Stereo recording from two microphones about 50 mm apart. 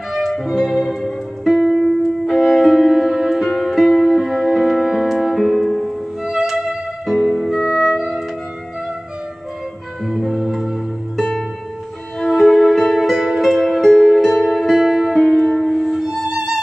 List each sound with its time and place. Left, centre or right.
0.3 s music: centre
7.2 s music: centre
7.6 s music: centre
10.0 s music: centre
13.1 s music: centre